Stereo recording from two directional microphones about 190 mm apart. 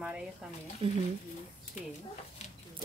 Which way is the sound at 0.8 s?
30° right (ahead or behind).